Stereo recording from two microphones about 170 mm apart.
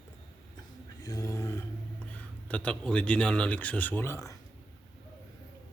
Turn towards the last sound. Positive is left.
turn(degrees=15)  # may be behind; listen again after turning